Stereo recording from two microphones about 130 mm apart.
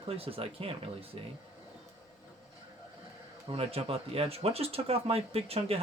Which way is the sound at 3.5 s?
50° right (ahead or behind).